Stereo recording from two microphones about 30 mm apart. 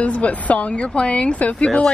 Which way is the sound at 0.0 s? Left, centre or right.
Left.